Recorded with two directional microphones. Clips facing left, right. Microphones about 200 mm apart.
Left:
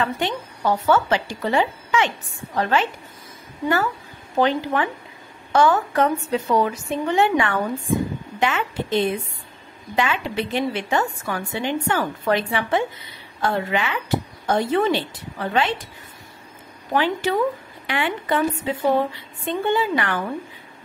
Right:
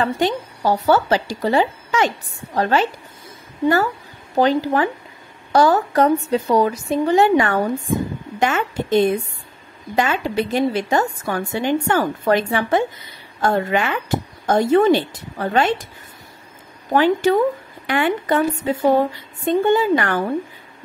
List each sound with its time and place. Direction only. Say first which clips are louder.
0.0 s a woman's voice: right 4 dB; 35° right (ahead or behind)
16.9 s a woman's voice: right 6 dB; 45° right (ahead or behind)